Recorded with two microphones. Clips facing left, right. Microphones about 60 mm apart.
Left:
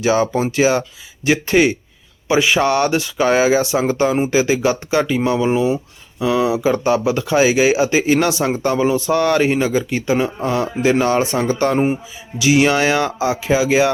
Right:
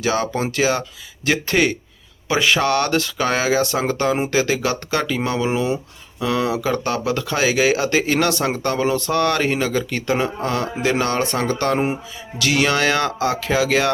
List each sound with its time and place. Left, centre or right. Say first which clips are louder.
0.0 s speech: left 4 dB; left